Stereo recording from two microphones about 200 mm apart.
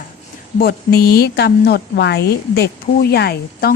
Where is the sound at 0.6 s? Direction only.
50° left (ahead or behind).